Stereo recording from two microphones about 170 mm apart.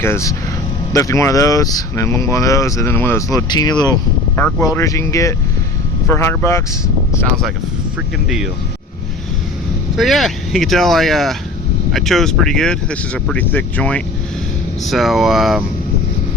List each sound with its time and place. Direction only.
0.0 s speech: 15° left (ahead or behind)
10.0 s speech: centre (ahead or behind)